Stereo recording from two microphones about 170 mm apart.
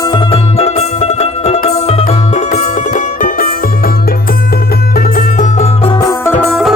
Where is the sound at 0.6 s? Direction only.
40° left (ahead or behind).